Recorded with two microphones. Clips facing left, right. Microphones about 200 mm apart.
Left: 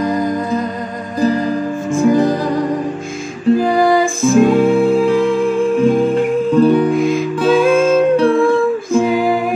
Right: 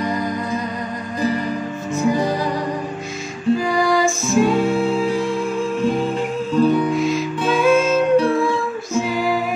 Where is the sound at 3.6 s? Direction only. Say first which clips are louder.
Left 5 dB; 55° left (ahead or behind).